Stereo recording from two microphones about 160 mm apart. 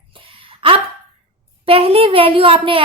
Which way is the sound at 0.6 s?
35° right (ahead or behind).